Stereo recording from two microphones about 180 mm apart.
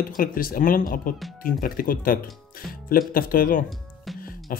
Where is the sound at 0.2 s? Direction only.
50° left (ahead or behind).